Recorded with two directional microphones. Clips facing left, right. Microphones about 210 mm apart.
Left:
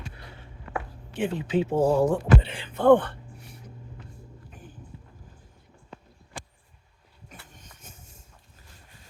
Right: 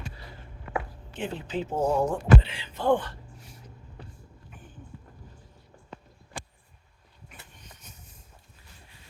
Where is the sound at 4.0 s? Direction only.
35° right (ahead or behind).